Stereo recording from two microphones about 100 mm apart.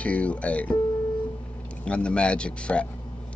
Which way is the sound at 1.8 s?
10° left (ahead or behind).